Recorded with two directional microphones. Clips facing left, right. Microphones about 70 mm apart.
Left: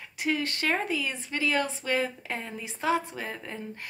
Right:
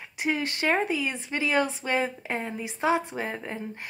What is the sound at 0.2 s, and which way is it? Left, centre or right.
Speech, right.